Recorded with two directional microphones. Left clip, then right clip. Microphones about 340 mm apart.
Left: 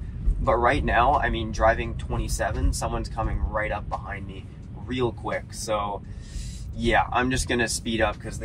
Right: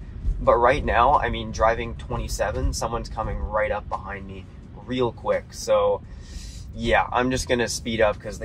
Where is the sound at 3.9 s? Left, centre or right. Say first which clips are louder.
Right 2 dB; centre.